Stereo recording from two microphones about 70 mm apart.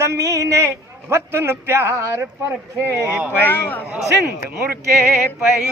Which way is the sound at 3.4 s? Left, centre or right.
Left.